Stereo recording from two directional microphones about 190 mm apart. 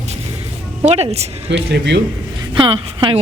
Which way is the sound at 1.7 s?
65° right (ahead or behind).